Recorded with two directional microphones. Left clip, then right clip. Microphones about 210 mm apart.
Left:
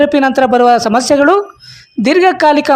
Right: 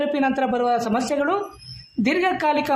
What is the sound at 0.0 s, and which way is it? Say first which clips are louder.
A woman's voice: left 12 dB; 45° left (ahead or behind).